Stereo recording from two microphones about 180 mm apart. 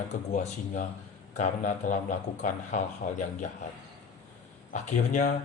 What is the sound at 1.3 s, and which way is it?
A man's voice, 40° left (ahead or behind).